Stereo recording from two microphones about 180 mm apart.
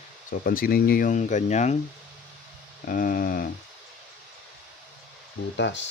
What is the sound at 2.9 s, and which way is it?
Speech, 50° left (ahead or behind).